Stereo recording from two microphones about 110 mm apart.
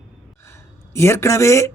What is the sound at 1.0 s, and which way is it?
Speech, 25° left (ahead or behind).